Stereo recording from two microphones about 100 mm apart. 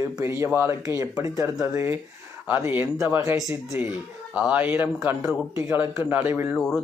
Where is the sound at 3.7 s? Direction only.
20° right (ahead or behind).